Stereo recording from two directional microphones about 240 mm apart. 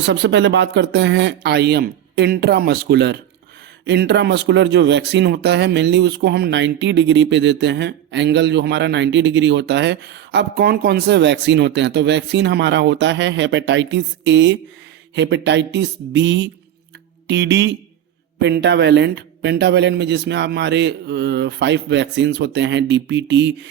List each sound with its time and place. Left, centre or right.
0.0 s speech: right